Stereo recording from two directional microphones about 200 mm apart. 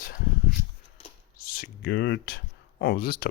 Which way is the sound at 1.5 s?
55° left (ahead or behind).